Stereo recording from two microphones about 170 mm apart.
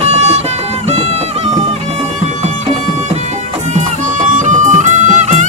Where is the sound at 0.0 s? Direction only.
40° right (ahead or behind).